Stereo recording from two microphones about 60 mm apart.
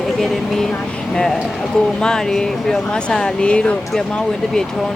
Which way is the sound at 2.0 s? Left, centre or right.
Centre.